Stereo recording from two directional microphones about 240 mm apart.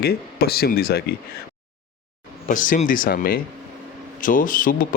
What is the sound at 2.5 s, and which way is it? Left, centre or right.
Speech, left.